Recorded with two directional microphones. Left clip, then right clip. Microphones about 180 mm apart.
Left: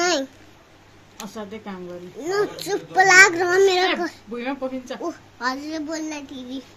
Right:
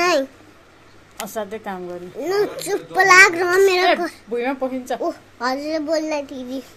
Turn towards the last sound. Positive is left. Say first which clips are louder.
# right 8 dB
turn(degrees=10)  # may be behind; listen again after turning